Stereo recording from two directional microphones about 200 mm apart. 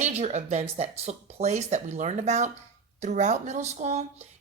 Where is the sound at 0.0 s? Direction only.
35° right (ahead or behind).